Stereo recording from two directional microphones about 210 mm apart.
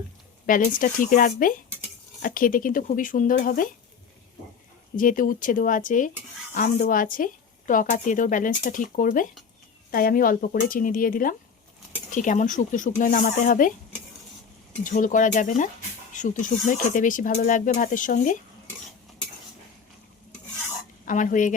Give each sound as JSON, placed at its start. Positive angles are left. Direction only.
{"t": 0.4, "sound": "speech", "side_deg": 40}
{"t": 4.9, "sound": "speech", "side_deg": 40}
{"t": 14.8, "sound": "speech", "side_deg": 40}
{"t": 21.0, "sound": "a woman's voice", "side_deg": 40}